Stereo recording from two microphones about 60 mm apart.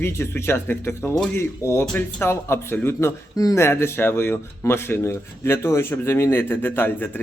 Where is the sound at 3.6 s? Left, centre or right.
Left.